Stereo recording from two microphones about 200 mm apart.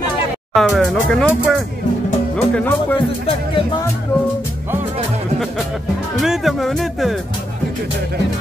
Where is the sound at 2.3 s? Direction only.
5° left (ahead or behind).